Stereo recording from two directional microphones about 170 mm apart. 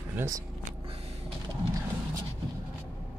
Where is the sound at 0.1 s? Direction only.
15° right (ahead or behind).